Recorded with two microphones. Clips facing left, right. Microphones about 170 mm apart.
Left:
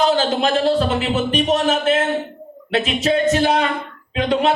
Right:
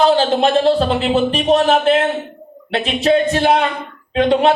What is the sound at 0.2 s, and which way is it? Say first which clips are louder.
Speech: right 4 dB; 30° right (ahead or behind).